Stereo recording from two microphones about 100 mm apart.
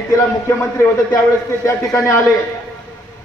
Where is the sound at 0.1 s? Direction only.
30° left (ahead or behind).